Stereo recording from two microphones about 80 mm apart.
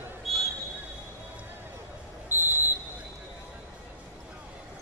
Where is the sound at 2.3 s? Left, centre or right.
Right.